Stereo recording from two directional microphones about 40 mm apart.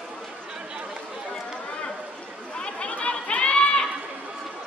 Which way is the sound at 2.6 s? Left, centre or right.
Left.